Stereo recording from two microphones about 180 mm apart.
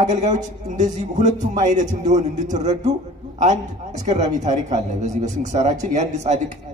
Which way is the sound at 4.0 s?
40° right (ahead or behind).